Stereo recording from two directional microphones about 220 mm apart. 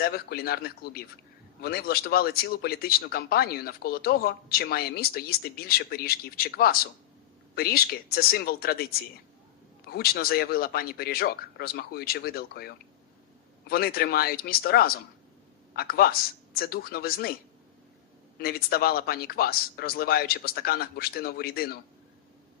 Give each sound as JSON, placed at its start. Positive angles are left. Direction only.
{"t": 0.0, "sound": "a man's voice", "side_deg": 45}
{"t": 18.3, "sound": "speech", "side_deg": 45}